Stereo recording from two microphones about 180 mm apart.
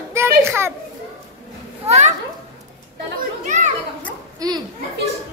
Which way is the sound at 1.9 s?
40° right (ahead or behind).